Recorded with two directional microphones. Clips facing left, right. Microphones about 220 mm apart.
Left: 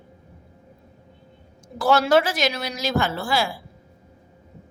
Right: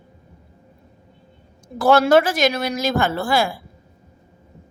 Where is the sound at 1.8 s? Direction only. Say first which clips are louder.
Right 4 dB; 55° right (ahead or behind).